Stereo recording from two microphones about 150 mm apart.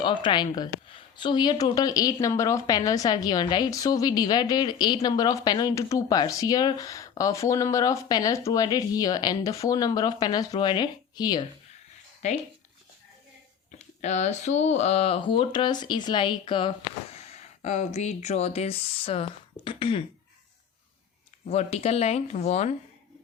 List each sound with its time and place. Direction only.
0.0 s speech: 30° left (ahead or behind)
12.2 s speech: 50° left (ahead or behind)
13.7 s speech: 50° left (ahead or behind); by 16.7 s 35° left (ahead or behind)
17.2 s speech: 45° left (ahead or behind)
21.4 s speech: 45° left (ahead or behind)